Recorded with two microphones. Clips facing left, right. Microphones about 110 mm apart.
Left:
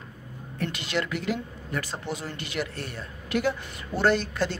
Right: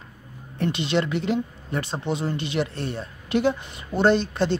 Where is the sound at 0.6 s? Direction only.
25° right (ahead or behind).